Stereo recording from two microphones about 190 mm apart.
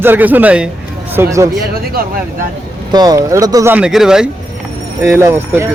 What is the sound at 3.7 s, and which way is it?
A man's voice, 5° right (ahead or behind).